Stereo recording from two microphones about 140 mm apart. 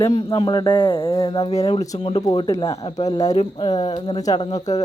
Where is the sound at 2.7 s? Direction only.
45° left (ahead or behind).